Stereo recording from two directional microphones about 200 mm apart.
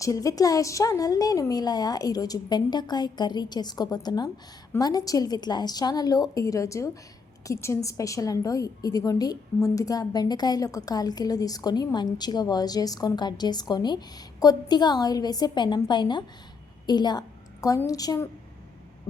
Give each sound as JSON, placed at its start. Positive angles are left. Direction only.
{"t": 0.0, "sound": "a woman's voice", "side_deg": 15}